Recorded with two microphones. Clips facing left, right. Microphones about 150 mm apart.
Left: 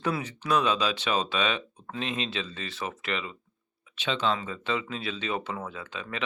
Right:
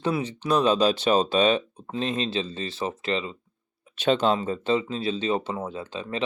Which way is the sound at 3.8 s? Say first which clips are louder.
Right 7 dB; 45° right (ahead or behind).